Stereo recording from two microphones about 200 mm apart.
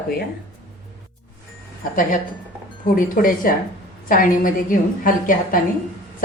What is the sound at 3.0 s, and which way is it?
A woman's voice, 45° left (ahead or behind).